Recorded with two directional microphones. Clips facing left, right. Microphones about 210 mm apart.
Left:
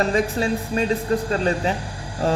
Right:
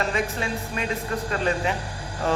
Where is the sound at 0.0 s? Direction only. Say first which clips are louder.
Left 6 dB; 35° left (ahead or behind).